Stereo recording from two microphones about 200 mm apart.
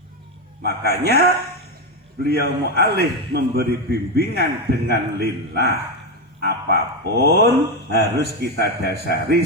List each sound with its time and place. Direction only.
0.6 s a man's voice: 55° right (ahead or behind)
2.2 s a man's voice: 55° right (ahead or behind)